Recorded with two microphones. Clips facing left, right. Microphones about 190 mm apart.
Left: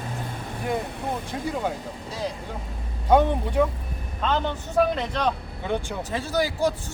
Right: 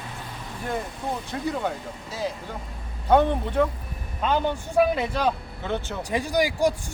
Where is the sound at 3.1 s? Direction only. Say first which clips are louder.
Even; 10° left (ahead or behind).